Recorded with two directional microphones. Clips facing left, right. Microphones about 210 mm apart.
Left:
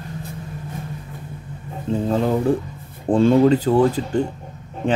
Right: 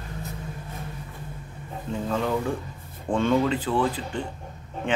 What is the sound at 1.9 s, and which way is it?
Speech, 35° left (ahead or behind).